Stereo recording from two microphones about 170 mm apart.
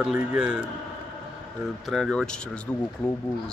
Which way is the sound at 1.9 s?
5° left (ahead or behind).